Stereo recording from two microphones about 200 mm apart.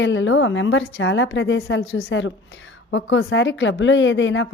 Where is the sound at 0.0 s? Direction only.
65° left (ahead or behind).